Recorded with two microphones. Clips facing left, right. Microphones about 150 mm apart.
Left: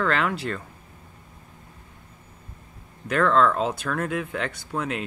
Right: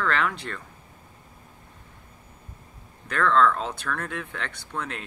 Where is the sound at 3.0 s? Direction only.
10° left (ahead or behind).